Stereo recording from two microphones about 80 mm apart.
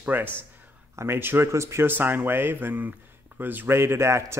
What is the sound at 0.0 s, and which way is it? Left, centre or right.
Speech, right.